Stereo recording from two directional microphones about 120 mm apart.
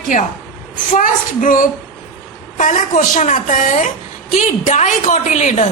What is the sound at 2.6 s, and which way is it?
A woman's voice, 80° left.